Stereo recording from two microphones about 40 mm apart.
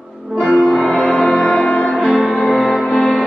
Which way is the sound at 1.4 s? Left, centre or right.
Left.